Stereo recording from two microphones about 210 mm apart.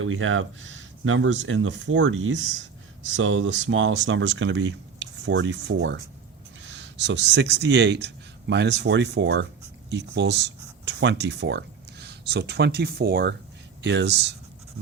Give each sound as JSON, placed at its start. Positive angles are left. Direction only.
{"t": 0.0, "sound": "speech", "side_deg": -75}